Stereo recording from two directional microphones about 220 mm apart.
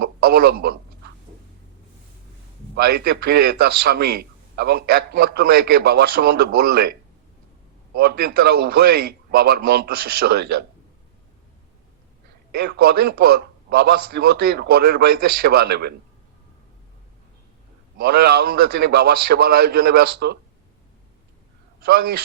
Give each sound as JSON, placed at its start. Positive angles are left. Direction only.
{"t": 0.0, "sound": "a sound", "side_deg": -45}
{"t": 2.7, "sound": "a man's voice", "side_deg": -45}
{"t": 7.9, "sound": "a man's voice", "side_deg": -45}
{"t": 12.5, "sound": "a man's voice", "side_deg": -45}
{"t": 17.9, "sound": "a man's voice", "side_deg": -45}
{"t": 21.8, "sound": "a man's voice", "side_deg": -45}